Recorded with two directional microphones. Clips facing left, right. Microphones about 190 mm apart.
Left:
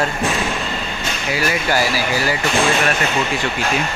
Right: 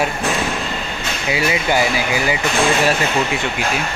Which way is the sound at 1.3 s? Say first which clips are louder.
Right 1 dB; 20° right (ahead or behind).